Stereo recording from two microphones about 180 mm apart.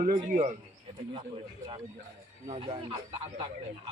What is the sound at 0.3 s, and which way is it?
Speech, 40° right (ahead or behind).